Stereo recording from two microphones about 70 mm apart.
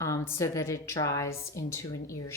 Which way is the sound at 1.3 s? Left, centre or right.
Left.